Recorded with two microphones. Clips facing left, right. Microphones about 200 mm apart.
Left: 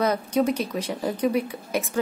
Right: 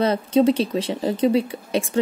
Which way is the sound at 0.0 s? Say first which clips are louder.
Right 5 dB; 25° right (ahead or behind).